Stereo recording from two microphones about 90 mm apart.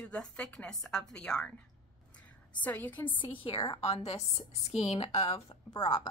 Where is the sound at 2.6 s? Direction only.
20° left (ahead or behind).